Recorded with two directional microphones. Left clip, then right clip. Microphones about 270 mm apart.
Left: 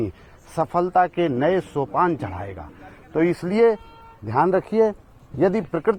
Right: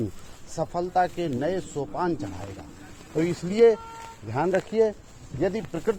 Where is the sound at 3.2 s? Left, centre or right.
Left.